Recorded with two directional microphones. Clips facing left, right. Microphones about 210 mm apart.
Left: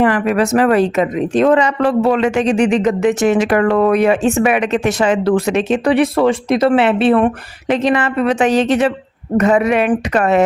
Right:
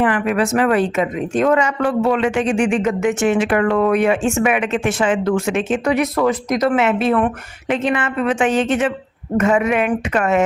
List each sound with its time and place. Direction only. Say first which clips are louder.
0.0 s a woman's voice: left 3 dB; 40° left (ahead or behind)